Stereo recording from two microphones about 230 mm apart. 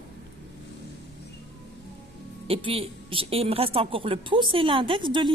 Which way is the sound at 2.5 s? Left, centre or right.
Right.